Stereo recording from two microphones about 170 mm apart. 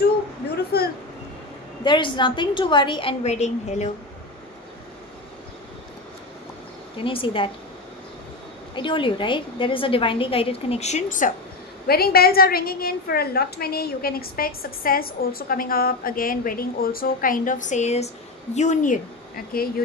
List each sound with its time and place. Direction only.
0.7 s a sound: 70° left (ahead or behind)
1.9 s a woman's voice: 30° left (ahead or behind)
7.0 s a woman's voice: 30° left (ahead or behind)
8.7 s a woman's voice: 30° left (ahead or behind); by 11.3 s 50° left (ahead or behind)
11.9 s a woman's voice: 65° left (ahead or behind)